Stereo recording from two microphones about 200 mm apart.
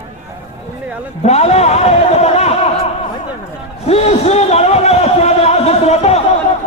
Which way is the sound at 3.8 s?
30° left (ahead or behind).